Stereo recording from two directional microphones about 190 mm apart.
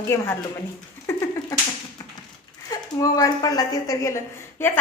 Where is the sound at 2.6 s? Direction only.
20° left (ahead or behind).